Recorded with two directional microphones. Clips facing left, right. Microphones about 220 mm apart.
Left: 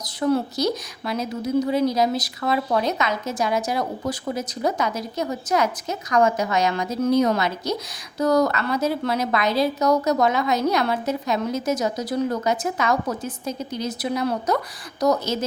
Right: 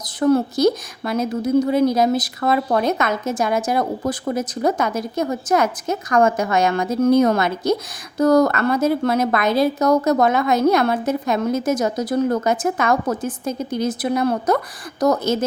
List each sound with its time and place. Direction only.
0.0 s speech: 45° right (ahead or behind)